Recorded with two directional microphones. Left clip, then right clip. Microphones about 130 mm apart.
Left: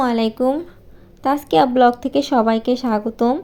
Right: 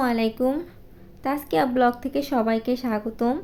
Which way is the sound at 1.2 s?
35° left (ahead or behind).